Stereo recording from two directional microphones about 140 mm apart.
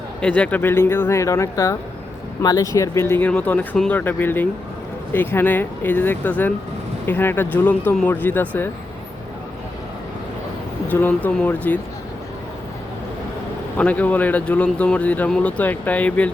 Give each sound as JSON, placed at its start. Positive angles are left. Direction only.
{"t": 0.2, "sound": "speech", "side_deg": 10}
{"t": 10.8, "sound": "speech", "side_deg": 10}
{"t": 13.7, "sound": "speech", "side_deg": 10}